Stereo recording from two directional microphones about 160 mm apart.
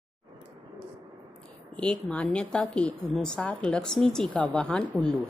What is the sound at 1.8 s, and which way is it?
A woman's voice, 5° left (ahead or behind).